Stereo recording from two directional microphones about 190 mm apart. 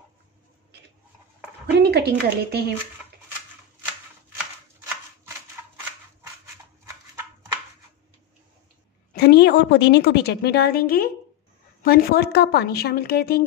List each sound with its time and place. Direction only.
1.8 s speech: 60° right (ahead or behind)
5.6 s a sound: 10° right (ahead or behind)
9.1 s a woman's voice: 55° left (ahead or behind)